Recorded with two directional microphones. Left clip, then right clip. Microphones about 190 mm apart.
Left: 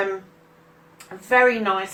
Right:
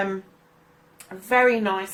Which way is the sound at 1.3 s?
40° right (ahead or behind).